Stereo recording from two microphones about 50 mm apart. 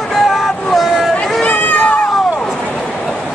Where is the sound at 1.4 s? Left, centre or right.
Left.